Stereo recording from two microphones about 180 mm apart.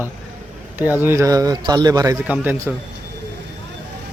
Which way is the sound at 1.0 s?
15° right (ahead or behind).